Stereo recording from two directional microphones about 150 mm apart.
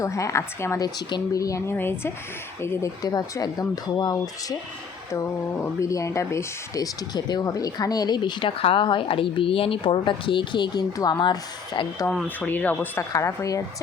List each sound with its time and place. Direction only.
0.0 s speech: 20° left (ahead or behind)
5.8 s speech: 20° left (ahead or behind)
12.1 s a woman's voice: 10° left (ahead or behind)